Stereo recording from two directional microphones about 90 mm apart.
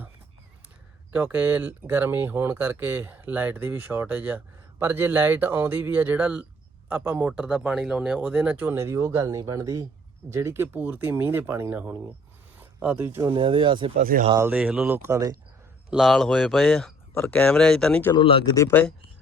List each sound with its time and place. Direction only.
1.1 s speech: 25° right (ahead or behind)
7.3 s speech: 10° right (ahead or behind)
13.2 s speech: 65° right (ahead or behind)
14.5 s speech: 15° right (ahead or behind); by 15.4 s 35° right (ahead or behind)
15.9 s speech: centre (ahead or behind)
17.2 s speech: 20° left (ahead or behind)